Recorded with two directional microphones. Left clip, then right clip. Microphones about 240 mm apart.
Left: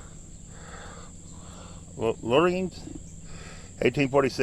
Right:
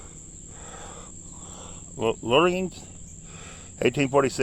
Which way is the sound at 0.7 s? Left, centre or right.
Right.